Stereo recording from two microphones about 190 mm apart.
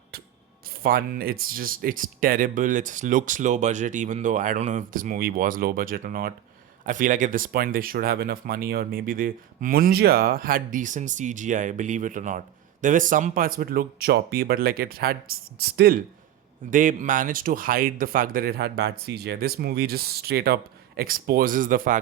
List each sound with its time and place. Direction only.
0.8 s speech: 50° right (ahead or behind)